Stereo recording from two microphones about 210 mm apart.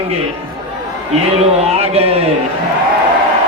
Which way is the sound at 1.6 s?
30° right (ahead or behind).